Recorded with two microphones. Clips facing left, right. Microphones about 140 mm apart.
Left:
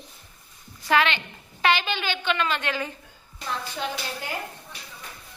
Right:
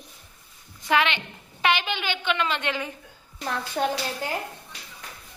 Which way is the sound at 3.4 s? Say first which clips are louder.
Right 4 dB; 50° right (ahead or behind).